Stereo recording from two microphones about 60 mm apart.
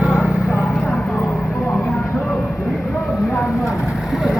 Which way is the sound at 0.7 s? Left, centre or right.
Centre.